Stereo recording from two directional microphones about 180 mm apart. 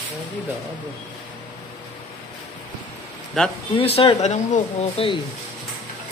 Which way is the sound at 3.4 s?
5° left (ahead or behind).